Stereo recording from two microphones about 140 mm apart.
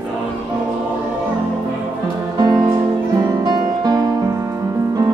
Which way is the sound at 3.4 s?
30° right (ahead or behind).